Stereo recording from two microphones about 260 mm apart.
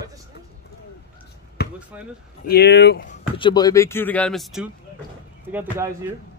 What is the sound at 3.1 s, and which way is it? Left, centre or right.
A man's voice, centre.